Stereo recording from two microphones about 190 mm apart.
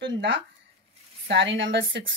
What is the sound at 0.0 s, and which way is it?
A woman's voice, 70° right (ahead or behind).